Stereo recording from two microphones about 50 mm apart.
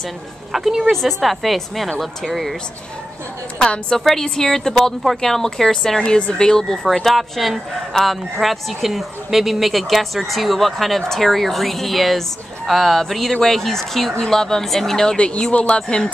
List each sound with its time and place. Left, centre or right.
0.5 s speech: centre
3.5 s speech: centre
6.0 s speech: left
15.1 s speech: centre